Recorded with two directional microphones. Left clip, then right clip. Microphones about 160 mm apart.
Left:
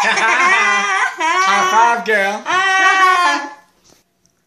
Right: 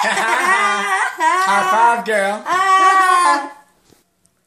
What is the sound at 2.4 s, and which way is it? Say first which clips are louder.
Speech: right 1 dB; 10° right (ahead or behind).